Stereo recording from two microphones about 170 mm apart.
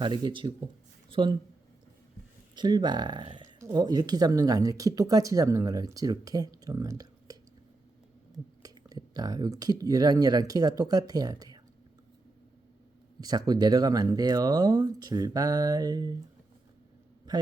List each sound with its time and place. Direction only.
0.0 s speech: 30° right (ahead or behind)
2.6 s speech: 25° right (ahead or behind)
8.6 s speech: 20° right (ahead or behind)
13.1 s speech: 20° right (ahead or behind)